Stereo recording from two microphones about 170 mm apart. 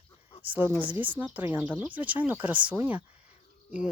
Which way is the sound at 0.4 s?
10° right (ahead or behind).